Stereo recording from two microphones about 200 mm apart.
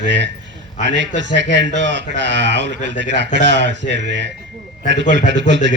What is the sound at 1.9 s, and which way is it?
Speech, 60° right (ahead or behind).